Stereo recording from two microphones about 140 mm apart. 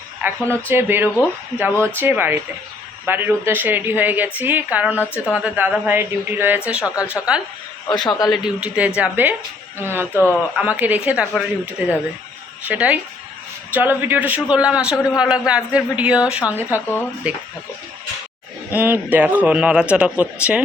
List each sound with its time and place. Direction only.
0.2 s a woman's voice: 15° right (ahead or behind)
6.8 s a woman's voice: 25° left (ahead or behind)
7.1 s a woman's voice: 5° right (ahead or behind)
7.9 s a man's voice: 30° left (ahead or behind)
8.3 s a woman's voice: 5° right (ahead or behind)
18.7 s a woman's voice: 15° right (ahead or behind)